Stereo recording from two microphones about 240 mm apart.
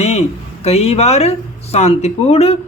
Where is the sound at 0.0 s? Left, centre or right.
Left.